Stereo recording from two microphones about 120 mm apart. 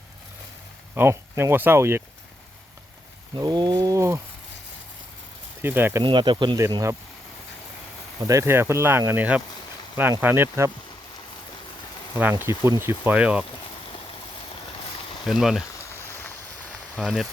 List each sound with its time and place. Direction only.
0.9 s speech: 20° right (ahead or behind)
3.3 s speech: 35° right (ahead or behind)
5.6 s speech: 20° right (ahead or behind)
6.0 s speech: 40° right (ahead or behind)
8.3 s speech: 25° right (ahead or behind)
12.1 s speech: 15° right (ahead or behind)
13.1 s speech: 10° right (ahead or behind)
15.3 s speech: 5° right (ahead or behind)
16.9 s speech: centre (ahead or behind)